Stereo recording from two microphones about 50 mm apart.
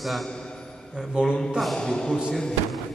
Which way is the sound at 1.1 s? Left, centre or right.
Centre.